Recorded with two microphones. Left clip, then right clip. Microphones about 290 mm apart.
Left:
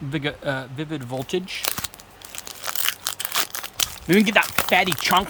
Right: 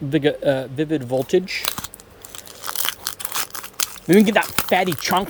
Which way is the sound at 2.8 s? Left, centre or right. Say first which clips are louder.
Left 2 dB; centre.